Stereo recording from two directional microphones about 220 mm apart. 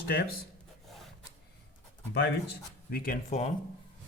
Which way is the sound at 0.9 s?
Centre (ahead or behind).